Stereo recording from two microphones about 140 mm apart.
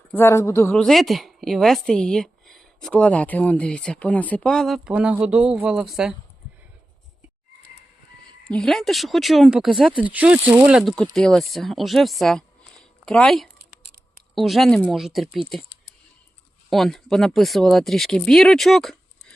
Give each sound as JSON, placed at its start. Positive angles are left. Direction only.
{"t": 0.1, "sound": "speech", "side_deg": 15}
{"t": 0.8, "sound": "a woman's voice", "side_deg": 0}
{"t": 8.4, "sound": "a woman's voice", "side_deg": 5}
{"t": 10.8, "sound": "a woman's voice", "side_deg": 5}
{"t": 16.6, "sound": "a woman's voice", "side_deg": 0}